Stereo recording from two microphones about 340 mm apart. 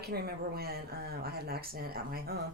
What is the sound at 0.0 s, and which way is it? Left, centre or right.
Speech, right.